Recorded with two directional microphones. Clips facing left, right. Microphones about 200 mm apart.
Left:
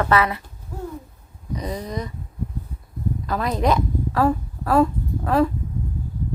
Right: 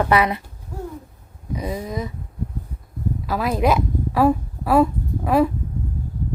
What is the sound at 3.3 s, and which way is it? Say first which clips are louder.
A woman's voice: right 2 dB; 5° right (ahead or behind).